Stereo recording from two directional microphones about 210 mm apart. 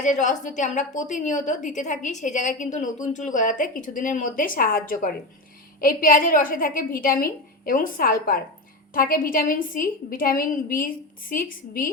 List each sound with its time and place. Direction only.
0.0 s a woman's voice: 35° left (ahead or behind)